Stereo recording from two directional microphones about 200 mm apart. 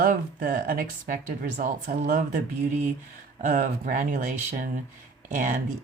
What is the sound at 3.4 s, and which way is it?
Speech, 40° right (ahead or behind).